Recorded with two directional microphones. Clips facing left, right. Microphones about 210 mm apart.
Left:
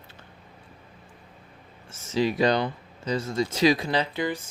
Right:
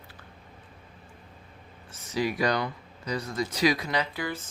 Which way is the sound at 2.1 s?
25° left (ahead or behind).